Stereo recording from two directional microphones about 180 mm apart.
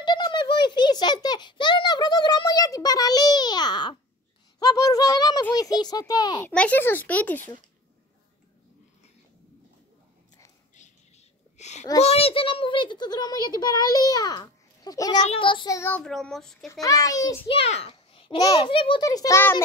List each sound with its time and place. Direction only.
0.0 s a sound: 25° left (ahead or behind)
5.5 s a child's voice: 20° left (ahead or behind)
6.5 s a child's voice: 10° left (ahead or behind)
11.5 s babbling: 40° left (ahead or behind)
12.0 s a child's voice: 35° left (ahead or behind); by 16.8 s centre (ahead or behind)
16.8 s a child's voice: 20° left (ahead or behind)
17.5 s a child's voice: 35° left (ahead or behind); by 19.6 s 15° left (ahead or behind)